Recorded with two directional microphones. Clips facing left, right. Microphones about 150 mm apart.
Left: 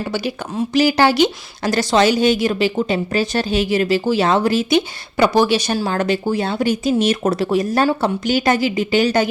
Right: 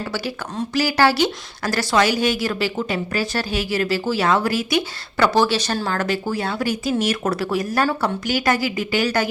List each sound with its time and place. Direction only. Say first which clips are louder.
0.0 s a woman's voice: left 4 dB; 20° left (ahead or behind)